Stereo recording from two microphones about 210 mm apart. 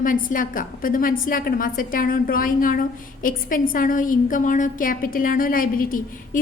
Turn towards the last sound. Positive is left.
turn(degrees=40)  # may be behind; listen again after turning